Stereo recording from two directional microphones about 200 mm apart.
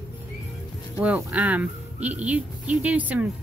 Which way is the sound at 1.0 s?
10° right (ahead or behind).